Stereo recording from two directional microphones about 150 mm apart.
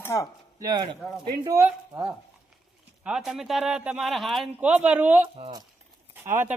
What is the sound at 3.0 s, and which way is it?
A woman's voice, 5° right (ahead or behind).